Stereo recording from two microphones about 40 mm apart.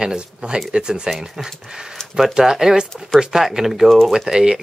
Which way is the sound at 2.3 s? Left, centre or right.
Centre.